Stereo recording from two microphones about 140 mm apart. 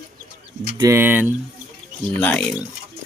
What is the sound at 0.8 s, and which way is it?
Speech, 20° right (ahead or behind).